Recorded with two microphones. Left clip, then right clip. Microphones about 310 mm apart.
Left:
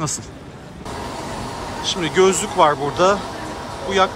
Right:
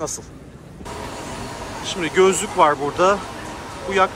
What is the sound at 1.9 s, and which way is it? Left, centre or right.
Speech, centre.